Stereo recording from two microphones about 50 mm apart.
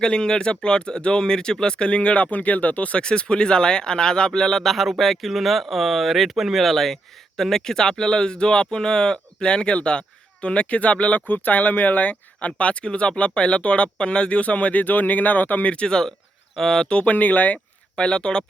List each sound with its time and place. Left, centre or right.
0.0 s speech: centre
3.0 s speech: centre
16.9 s speech: left
17.9 s speech: centre